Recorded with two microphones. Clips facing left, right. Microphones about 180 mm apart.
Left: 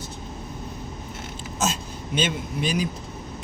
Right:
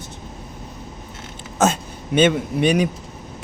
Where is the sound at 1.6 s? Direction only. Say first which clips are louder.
Right 8 dB; 60° right (ahead or behind).